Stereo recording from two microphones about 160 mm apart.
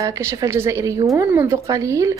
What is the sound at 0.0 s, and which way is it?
Speech, 20° right (ahead or behind).